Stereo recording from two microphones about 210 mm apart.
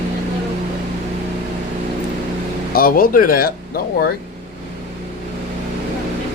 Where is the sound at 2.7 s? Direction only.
45° left (ahead or behind).